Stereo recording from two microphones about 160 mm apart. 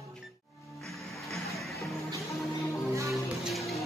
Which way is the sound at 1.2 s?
Centre (ahead or behind).